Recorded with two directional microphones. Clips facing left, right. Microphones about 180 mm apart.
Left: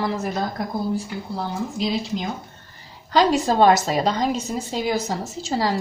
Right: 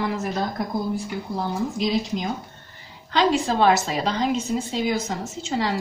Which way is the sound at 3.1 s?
40° left (ahead or behind).